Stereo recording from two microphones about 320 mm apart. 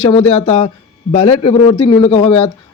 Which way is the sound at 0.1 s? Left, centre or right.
Centre.